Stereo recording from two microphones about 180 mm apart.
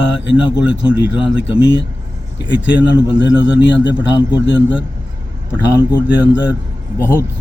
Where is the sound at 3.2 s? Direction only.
80° left.